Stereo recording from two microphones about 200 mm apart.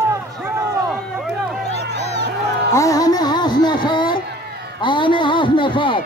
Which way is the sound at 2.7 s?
15° left (ahead or behind).